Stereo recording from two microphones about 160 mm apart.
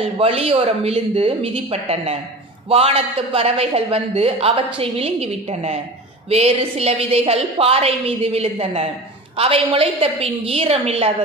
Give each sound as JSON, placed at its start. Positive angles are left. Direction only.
{"t": 0.2, "sound": "a woman's voice", "side_deg": -40}